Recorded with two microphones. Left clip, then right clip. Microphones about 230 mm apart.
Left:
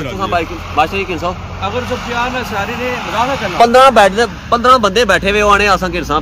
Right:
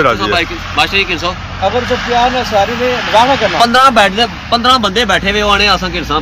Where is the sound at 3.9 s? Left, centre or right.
Left.